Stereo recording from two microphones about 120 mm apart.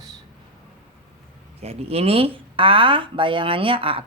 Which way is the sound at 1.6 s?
55° right (ahead or behind).